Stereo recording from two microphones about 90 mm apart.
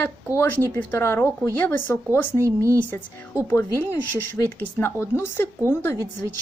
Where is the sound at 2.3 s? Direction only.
35° right (ahead or behind).